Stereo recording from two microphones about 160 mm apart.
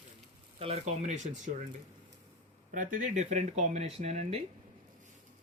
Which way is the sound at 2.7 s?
55° right (ahead or behind).